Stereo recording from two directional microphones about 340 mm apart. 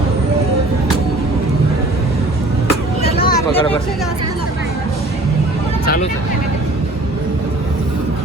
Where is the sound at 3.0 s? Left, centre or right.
Left.